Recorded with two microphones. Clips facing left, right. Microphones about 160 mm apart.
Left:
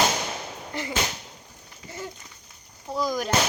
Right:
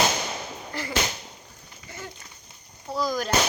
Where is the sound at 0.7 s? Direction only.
20° left (ahead or behind).